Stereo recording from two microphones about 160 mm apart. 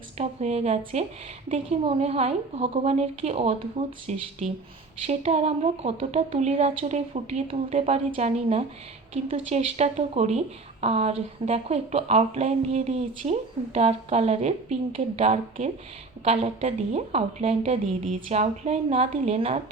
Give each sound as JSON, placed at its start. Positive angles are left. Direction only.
{"t": 0.2, "sound": "a woman's voice", "side_deg": -40}